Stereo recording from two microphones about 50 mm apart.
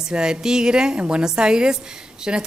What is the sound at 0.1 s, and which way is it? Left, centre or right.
A woman's voice, centre.